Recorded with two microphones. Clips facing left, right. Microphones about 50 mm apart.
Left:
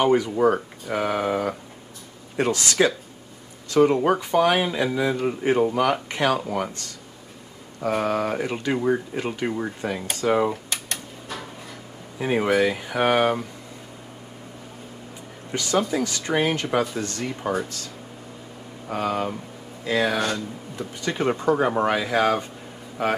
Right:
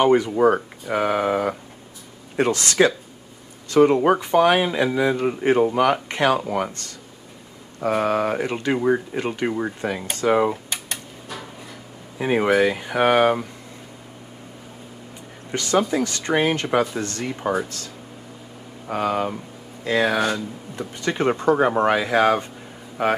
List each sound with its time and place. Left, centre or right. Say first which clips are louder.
0.0 s speech: right 3 dB; centre
2.5 s speech: right 1 dB; centre
3.7 s speech: right 3 dB; centre
7.8 s speech: right 3 dB; centre
10.2 s a sound: right 2 dB; centre
12.2 s speech: right 2 dB; centre
15.5 s speech: right 3 dB; centre
18.9 s speech: right 3 dB; centre